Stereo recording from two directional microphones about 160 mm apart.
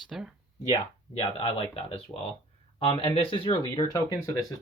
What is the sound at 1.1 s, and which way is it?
Speech, 35° left (ahead or behind).